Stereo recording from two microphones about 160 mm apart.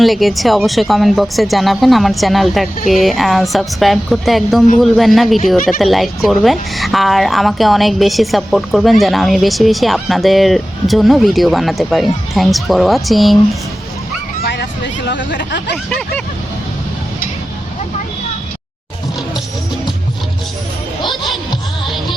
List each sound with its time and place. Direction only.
0.0 s a woman's voice: centre (ahead or behind)
14.4 s speech: 90° left
15.7 s a woman's voice: 5° left (ahead or behind)